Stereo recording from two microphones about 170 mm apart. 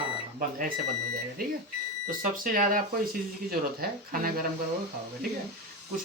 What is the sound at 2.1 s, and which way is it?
Speech, 55° right (ahead or behind).